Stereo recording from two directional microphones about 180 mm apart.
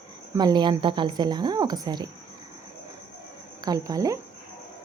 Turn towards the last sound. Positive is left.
turn(degrees=-20)  # may be behind; listen again after turning